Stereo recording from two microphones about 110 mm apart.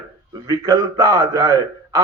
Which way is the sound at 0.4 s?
35° right (ahead or behind).